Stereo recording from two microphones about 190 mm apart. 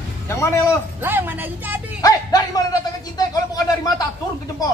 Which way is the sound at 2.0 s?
20° left (ahead or behind).